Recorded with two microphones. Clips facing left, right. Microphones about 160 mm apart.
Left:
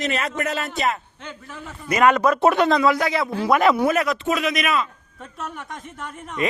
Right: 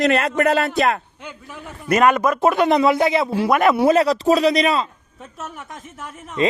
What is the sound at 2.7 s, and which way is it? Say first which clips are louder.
Speech: right 3 dB; 25° right (ahead or behind).